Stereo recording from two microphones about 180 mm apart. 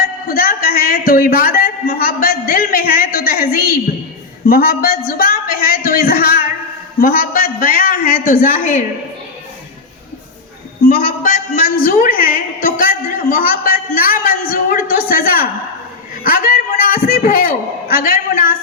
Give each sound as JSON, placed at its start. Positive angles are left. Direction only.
{"t": 0.0, "sound": "a man's voice", "side_deg": 55}
{"t": 10.8, "sound": "a woman's voice", "side_deg": 50}